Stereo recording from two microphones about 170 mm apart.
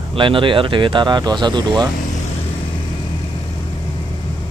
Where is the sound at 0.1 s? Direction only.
30° right (ahead or behind).